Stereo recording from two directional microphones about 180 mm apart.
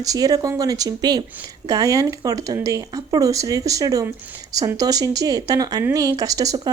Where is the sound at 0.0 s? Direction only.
20° right (ahead or behind).